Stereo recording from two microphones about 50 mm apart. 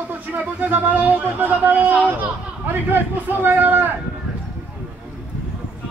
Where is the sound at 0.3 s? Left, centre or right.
Right.